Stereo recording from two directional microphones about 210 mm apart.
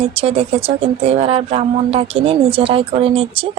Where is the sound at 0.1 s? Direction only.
30° right (ahead or behind).